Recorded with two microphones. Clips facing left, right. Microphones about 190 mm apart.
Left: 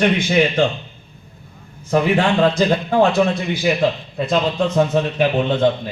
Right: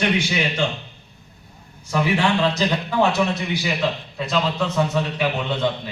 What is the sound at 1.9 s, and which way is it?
A man's voice, 50° left (ahead or behind).